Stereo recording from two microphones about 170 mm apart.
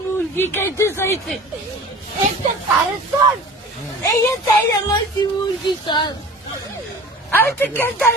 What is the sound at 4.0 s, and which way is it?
Speech, 20° left (ahead or behind).